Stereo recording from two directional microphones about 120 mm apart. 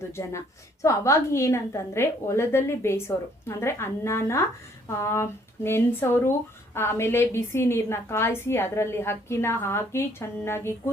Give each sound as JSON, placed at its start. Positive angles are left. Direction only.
{"t": 0.1, "sound": "a woman's voice", "side_deg": 25}